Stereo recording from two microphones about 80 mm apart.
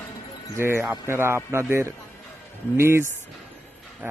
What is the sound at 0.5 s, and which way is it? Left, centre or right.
Speech, right.